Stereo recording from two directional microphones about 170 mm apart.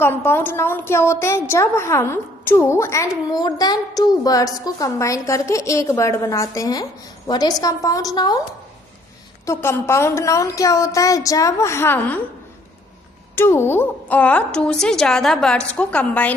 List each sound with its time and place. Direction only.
0.0 s a woman's voice: 10° left (ahead or behind)
9.5 s a woman's voice: 15° left (ahead or behind)
13.3 s a woman's voice: 15° left (ahead or behind)